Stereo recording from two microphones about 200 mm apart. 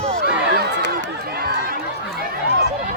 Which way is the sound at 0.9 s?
50° right (ahead or behind).